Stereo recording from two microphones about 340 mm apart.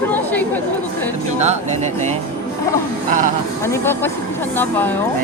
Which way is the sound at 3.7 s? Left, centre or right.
Centre.